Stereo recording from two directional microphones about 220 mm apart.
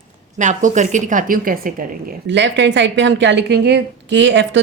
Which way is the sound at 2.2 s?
55° right (ahead or behind).